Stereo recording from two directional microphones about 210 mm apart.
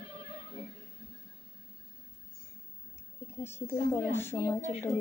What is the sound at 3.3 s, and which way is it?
Speech, 10° left (ahead or behind).